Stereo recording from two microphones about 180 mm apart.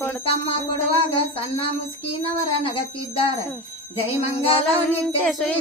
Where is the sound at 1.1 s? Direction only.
30° left (ahead or behind).